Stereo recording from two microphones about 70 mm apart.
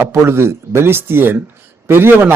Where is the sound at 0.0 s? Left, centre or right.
Right.